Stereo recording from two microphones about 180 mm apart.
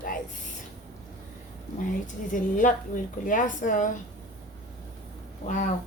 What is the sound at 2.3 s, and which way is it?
Speech, 45° left (ahead or behind).